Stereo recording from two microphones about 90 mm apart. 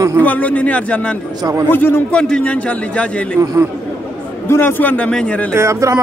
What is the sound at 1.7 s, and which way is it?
Speech, 25° left (ahead or behind).